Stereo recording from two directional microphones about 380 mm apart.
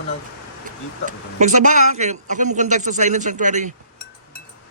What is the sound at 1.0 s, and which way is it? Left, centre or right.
Speech, centre.